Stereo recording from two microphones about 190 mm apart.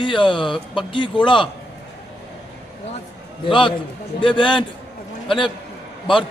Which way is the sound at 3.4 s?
25° left (ahead or behind).